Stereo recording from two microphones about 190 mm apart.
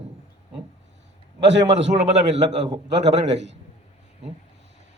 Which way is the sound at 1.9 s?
35° right (ahead or behind).